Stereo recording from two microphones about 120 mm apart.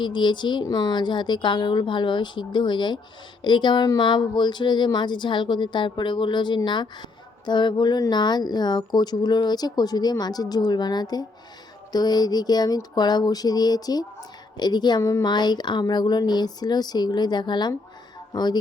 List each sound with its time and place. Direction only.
0.0 s speech: 40° left (ahead or behind)